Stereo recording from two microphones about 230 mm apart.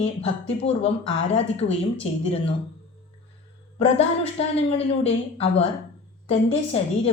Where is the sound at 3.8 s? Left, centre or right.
Left.